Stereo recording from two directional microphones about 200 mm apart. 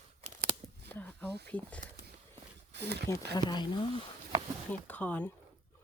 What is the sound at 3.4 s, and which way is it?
Speech, 20° left (ahead or behind).